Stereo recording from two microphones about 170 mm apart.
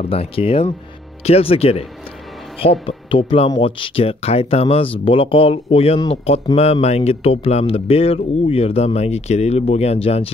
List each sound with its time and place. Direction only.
0.0 s a man's voice: 35° left (ahead or behind)
2.9 s a man's voice: 30° left (ahead or behind)